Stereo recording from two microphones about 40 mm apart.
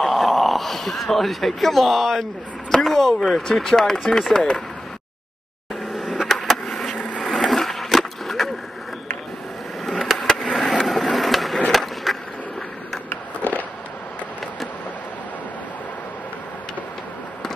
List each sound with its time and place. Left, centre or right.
0.0 s speech: centre; by 4.6 s left
5.9 s vehicle: centre
6.2 s vehicle: centre
7.2 s skateboard: centre
9.8 s skateboard: centre
10.7 s a sound: centre
11.7 s skateboard: centre